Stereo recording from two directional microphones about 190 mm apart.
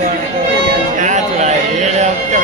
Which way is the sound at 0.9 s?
40° right (ahead or behind).